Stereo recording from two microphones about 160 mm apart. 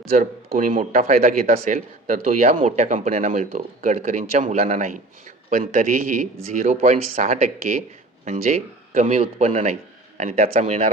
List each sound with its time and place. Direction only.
0.2 s a man's voice: 60° right (ahead or behind)
1.0 s a man's voice: 45° right (ahead or behind)